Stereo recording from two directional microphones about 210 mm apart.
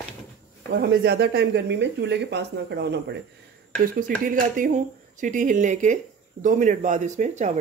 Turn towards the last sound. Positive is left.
turn(degrees=-35)  # may be behind; listen again after turning